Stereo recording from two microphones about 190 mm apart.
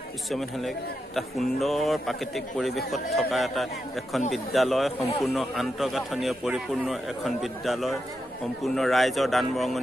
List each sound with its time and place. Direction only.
0.3 s a man's voice: centre (ahead or behind)